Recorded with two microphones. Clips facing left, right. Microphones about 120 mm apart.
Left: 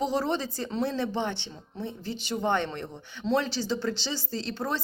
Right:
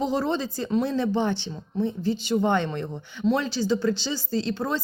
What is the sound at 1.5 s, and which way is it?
A woman's voice, 20° right (ahead or behind).